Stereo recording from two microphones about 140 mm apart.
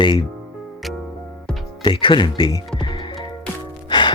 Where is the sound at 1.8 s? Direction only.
35° left (ahead or behind).